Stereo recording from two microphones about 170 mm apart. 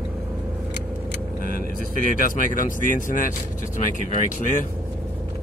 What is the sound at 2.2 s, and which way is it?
Speech, 55° left (ahead or behind).